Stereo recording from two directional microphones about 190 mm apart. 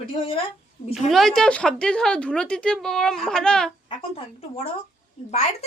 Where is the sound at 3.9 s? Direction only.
30° left (ahead or behind).